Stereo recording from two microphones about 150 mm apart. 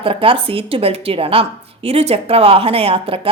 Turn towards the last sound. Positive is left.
turn(degrees=-40)  # may be behind; listen again after turning